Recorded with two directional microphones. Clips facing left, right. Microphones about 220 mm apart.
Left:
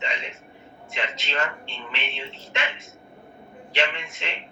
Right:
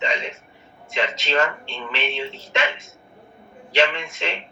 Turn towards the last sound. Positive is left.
turn(degrees=-90)